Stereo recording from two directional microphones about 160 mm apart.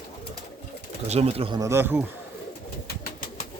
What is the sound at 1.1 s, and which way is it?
Speech, 40° right (ahead or behind).